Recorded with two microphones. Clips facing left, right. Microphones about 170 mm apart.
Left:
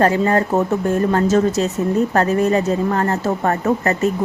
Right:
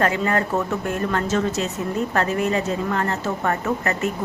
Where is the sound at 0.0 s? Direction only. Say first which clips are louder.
Left 5 dB; 35° left (ahead or behind).